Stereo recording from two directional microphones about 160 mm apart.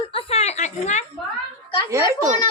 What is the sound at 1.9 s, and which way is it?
Speech, 15° right (ahead or behind).